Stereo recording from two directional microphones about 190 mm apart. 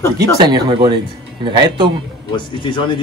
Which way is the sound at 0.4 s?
25° right (ahead or behind).